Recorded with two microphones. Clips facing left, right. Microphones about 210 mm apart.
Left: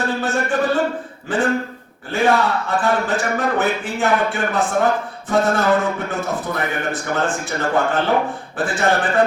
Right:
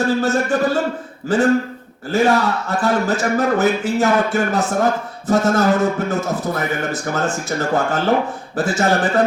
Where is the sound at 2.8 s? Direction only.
40° right (ahead or behind).